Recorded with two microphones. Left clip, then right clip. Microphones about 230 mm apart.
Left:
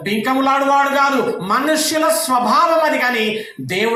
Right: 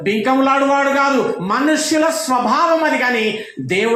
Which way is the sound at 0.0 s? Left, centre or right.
Left.